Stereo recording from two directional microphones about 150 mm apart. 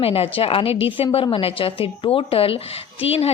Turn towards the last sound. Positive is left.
turn(degrees=40)  # may be behind; listen again after turning